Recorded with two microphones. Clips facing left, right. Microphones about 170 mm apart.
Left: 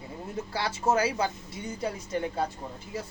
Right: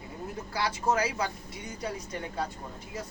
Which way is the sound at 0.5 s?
25° left (ahead or behind).